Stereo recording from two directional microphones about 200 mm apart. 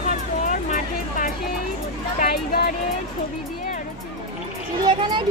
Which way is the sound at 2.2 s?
50° left (ahead or behind).